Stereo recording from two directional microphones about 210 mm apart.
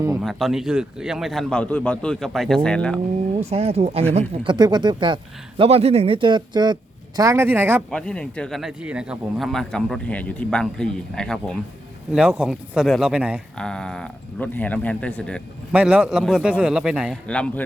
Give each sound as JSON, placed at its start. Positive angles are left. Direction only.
{"t": 0.2, "sound": "speech", "side_deg": 0}
{"t": 3.5, "sound": "speech", "side_deg": -30}
{"t": 7.9, "sound": "speech", "side_deg": 5}
{"t": 15.7, "sound": "speech", "side_deg": -5}